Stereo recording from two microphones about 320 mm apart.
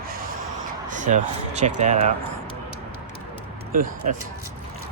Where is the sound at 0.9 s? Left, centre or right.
Right.